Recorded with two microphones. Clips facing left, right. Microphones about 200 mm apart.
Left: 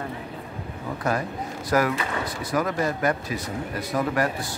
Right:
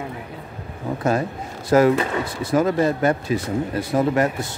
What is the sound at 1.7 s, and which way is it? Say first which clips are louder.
Speech: right 8 dB; 25° right (ahead or behind).